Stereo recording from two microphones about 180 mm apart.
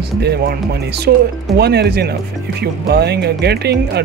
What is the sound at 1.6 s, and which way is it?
Speech, 65° right (ahead or behind).